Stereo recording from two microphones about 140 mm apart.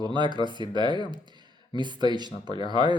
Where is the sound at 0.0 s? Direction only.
30° right (ahead or behind).